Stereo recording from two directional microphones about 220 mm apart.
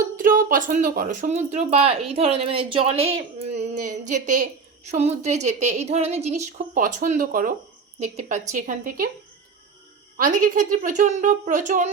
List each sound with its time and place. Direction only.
0.2 s speech: 40° right (ahead or behind)
10.2 s speech: 35° right (ahead or behind)